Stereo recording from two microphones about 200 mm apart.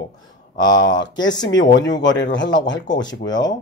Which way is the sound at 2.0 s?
65° left (ahead or behind).